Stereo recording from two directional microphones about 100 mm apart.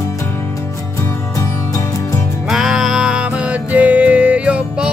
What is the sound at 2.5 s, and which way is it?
Music, 5° right (ahead or behind).